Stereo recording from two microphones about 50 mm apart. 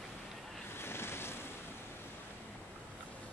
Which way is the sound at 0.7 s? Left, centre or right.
Left.